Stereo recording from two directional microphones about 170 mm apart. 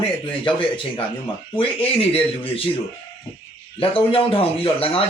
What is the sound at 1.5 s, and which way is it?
Speech, 35° left (ahead or behind).